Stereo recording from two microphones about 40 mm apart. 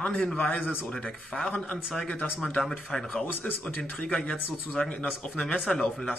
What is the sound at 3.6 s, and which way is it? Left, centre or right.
Speech, left.